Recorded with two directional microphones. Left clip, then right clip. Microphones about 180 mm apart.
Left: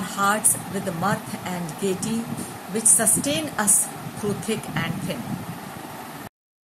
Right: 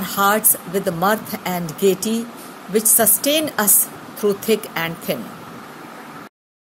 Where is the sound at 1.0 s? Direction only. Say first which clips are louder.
Right 5 dB; 50° right (ahead or behind).